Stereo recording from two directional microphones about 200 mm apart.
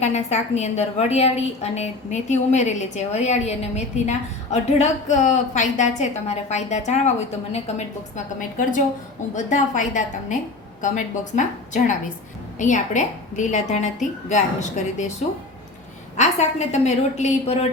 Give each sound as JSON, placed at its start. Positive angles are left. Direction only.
{"t": 0.0, "sound": "a woman's voice", "side_deg": 35}
{"t": 16.1, "sound": "a woman's voice", "side_deg": 35}